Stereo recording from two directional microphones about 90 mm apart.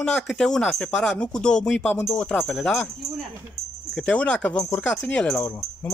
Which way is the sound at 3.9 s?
10° left (ahead or behind).